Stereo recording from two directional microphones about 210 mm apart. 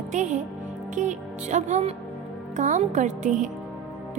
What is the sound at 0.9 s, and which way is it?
Speech, 35° right (ahead or behind).